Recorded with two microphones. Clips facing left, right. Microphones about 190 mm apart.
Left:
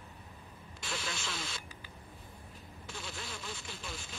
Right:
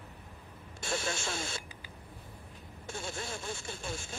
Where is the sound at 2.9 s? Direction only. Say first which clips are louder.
Right 6 dB; 50° right (ahead or behind).